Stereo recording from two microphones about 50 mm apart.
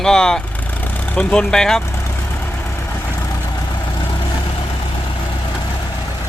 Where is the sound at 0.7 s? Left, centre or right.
Left; by 1.8 s centre.